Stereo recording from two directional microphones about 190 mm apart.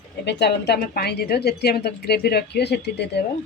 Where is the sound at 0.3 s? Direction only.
60° left (ahead or behind).